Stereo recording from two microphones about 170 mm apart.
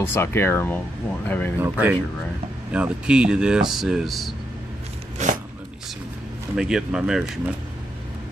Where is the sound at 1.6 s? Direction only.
10° right (ahead or behind).